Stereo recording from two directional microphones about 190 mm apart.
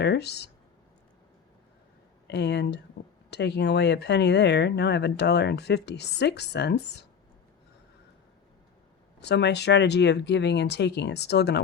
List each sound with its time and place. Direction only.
0.0 s speech: 60° left (ahead or behind)
2.2 s speech: 60° left (ahead or behind)
9.2 s speech: 65° left (ahead or behind)